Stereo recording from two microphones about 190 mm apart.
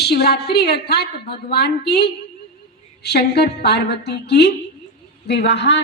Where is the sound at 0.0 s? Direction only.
55° left (ahead or behind).